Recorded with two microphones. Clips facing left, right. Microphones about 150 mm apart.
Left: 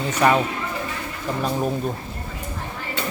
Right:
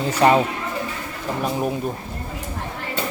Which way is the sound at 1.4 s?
10° right (ahead or behind).